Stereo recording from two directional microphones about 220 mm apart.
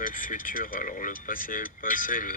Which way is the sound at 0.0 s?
40° left (ahead or behind).